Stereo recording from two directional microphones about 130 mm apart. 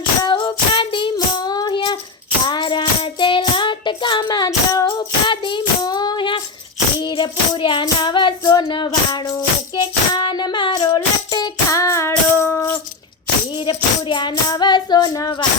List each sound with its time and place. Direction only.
0.2 s music: 35° left (ahead or behind)
1.1 s child singing: 30° left (ahead or behind)
7.0 s music: 35° left (ahead or behind)
13.6 s music: 35° left (ahead or behind)